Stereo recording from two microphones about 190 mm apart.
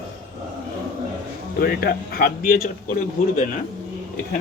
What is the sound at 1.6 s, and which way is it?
Speech, 50° left (ahead or behind).